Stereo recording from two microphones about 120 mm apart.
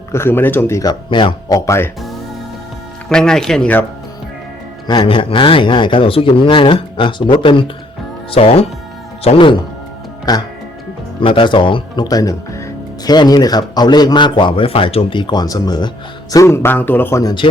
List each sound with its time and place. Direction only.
0.1 s speech: 20° left (ahead or behind)
0.8 s speech: 35° left (ahead or behind)
1.5 s speech: 25° left (ahead or behind)
3.1 s speech: 5° left (ahead or behind)
4.9 s speech: 40° left (ahead or behind)
8.3 s speech: 55° left (ahead or behind)
9.2 s speech: 45° left (ahead or behind)
10.3 s speech: 35° left (ahead or behind)
11.2 s speech: 45° left (ahead or behind)
12.0 s speech: 30° left (ahead or behind)
16.3 s speech: 25° left (ahead or behind)
17.4 s speech: 45° left (ahead or behind)